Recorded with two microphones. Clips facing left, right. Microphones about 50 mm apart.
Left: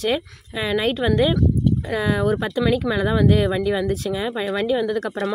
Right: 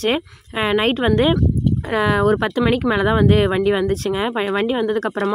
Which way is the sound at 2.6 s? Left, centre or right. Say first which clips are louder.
Right 1 dB; right.